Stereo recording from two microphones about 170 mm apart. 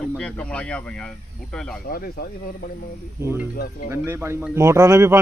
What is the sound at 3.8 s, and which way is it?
Speech, 15° right (ahead or behind).